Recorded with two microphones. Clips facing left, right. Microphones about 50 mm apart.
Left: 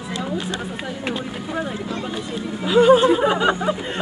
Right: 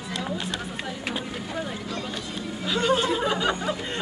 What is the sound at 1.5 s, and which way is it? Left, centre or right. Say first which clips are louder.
Speech: left 7 dB; centre.